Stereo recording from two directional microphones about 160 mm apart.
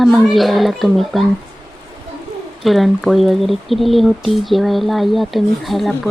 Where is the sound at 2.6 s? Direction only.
Centre (ahead or behind).